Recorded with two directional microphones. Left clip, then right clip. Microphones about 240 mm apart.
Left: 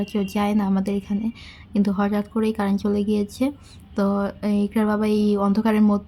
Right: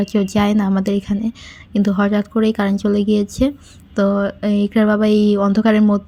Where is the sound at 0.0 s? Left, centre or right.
Centre.